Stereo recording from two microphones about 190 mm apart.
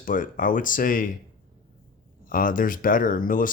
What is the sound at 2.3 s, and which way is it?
Speech, 45° left (ahead or behind).